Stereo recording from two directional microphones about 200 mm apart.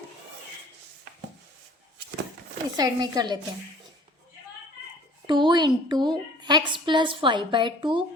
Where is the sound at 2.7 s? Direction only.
20° right (ahead or behind).